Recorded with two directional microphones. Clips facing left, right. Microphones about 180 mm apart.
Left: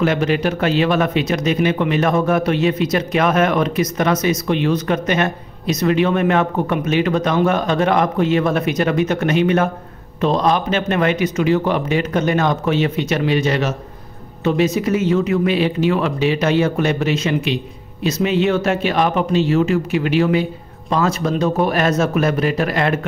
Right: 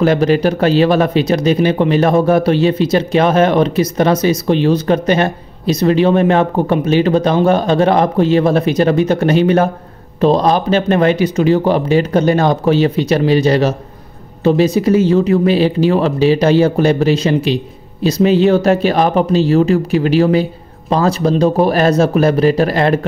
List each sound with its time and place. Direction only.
0.0 s speech: 35° right (ahead or behind)